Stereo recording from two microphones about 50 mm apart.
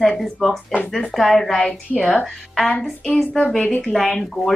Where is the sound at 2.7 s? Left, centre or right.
Left.